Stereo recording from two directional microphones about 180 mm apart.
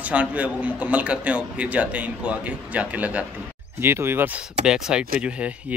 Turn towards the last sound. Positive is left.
turn(degrees=-5)  # may be behind; listen again after turning